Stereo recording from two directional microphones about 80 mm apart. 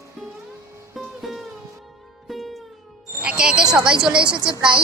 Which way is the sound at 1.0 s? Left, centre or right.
Centre.